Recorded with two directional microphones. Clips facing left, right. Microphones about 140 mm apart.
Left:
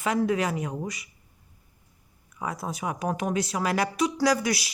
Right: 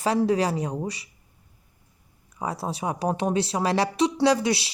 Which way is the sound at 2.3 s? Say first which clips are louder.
Right 3 dB; 30° right (ahead or behind).